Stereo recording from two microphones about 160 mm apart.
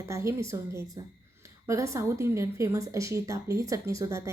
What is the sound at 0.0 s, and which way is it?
A woman's voice, 20° right (ahead or behind).